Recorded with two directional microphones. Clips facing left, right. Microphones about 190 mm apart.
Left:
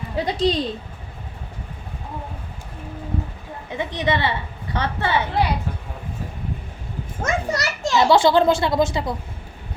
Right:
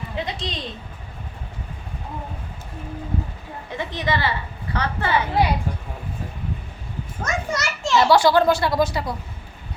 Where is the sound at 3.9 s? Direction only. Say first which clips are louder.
Left 2 dB; 25° left (ahead or behind).